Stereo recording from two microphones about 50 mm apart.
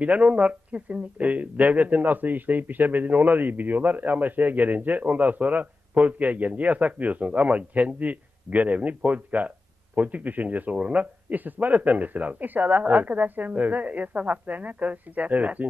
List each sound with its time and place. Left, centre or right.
0.0 s speech: right